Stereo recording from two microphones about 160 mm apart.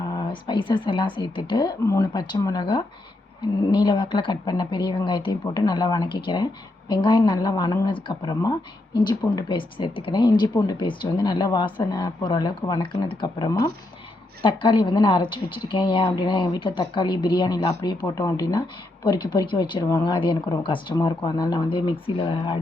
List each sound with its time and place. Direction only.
0.1 s speech: 30° left (ahead or behind)